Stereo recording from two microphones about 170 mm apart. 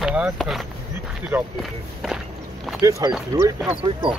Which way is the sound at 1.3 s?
15° right (ahead or behind).